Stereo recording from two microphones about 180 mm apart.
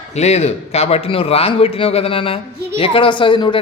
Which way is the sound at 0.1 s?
35° left (ahead or behind).